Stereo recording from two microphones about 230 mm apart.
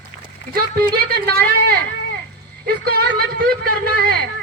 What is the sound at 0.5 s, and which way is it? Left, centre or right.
Speech, right.